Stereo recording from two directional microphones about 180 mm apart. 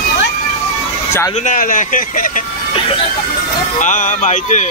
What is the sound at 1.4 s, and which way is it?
A man's voice, 45° left (ahead or behind).